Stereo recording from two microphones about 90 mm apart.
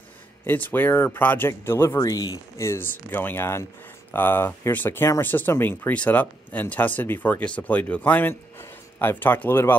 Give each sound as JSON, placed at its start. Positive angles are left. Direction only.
{"t": 0.5, "sound": "speech", "side_deg": 20}
{"t": 2.0, "sound": "speech", "side_deg": 45}
{"t": 2.5, "sound": "speech", "side_deg": 35}
{"t": 3.1, "sound": "speech", "side_deg": 20}